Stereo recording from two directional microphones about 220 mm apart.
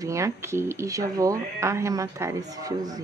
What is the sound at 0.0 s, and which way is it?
Speech, 15° right (ahead or behind).